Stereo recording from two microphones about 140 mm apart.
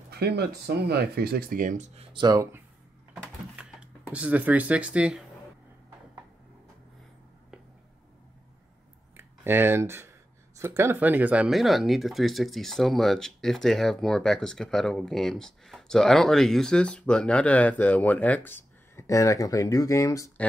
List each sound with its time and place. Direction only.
1.1 s speech: 90° right; by 1.9 s 65° right (ahead or behind)
2.1 s speech: 25° right (ahead or behind)
3.6 s a sound: 10° right (ahead or behind)
4.1 s speech: 10° right (ahead or behind)
9.1 s a sound: 15° right (ahead or behind)
10.6 s speech: 20° right (ahead or behind); by 20.2 s 25° left (ahead or behind)